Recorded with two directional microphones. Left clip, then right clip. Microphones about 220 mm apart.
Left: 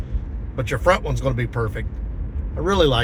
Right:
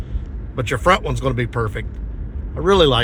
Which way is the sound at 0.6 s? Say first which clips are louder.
Right 2 dB; 50° right (ahead or behind).